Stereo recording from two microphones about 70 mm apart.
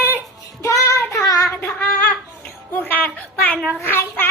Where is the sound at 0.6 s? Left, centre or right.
Left.